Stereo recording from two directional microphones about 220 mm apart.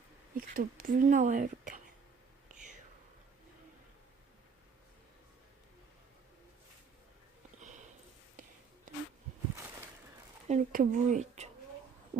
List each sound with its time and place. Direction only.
0.3 s speech: 40° right (ahead or behind)
2.5 s whispering: 35° right (ahead or behind)
7.6 s sniff: 35° right (ahead or behind)
10.5 s speech: 35° right (ahead or behind)